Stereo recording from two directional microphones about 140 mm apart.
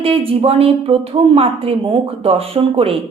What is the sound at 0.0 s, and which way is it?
A woman's voice, 40° right (ahead or behind).